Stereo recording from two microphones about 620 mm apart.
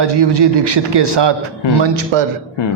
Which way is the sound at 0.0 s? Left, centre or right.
Right.